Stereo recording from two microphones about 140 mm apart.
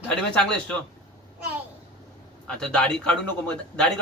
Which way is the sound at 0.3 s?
5° left (ahead or behind).